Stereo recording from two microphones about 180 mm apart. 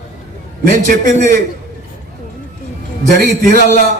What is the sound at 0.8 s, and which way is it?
Speech, 50° right (ahead or behind).